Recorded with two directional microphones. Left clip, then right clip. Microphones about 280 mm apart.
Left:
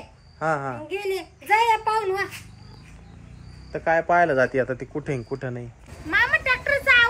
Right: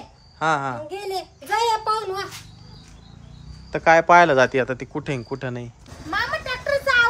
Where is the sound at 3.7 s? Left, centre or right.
Centre.